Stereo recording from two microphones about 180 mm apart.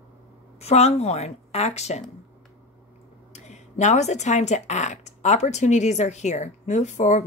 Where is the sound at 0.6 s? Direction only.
35° left (ahead or behind).